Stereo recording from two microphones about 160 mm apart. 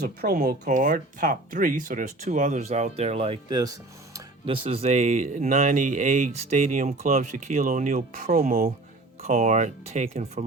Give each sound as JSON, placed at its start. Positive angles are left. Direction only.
{"t": 0.0, "sound": "speech", "side_deg": -80}
{"t": 0.6, "sound": "speech", "side_deg": -55}
{"t": 3.5, "sound": "speech", "side_deg": -25}
{"t": 4.4, "sound": "speech", "side_deg": -35}